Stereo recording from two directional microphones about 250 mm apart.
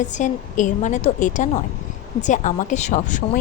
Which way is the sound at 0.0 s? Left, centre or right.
Left.